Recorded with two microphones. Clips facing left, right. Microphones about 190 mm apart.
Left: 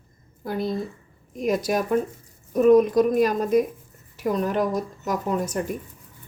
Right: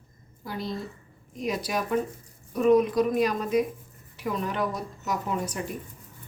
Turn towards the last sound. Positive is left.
turn(degrees=45)  # may be behind; listen again after turning